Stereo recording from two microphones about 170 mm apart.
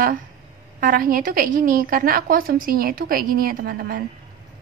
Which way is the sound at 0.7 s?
55° right (ahead or behind).